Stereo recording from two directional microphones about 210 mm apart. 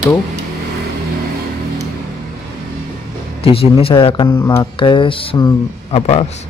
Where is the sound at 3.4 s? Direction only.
25° left (ahead or behind).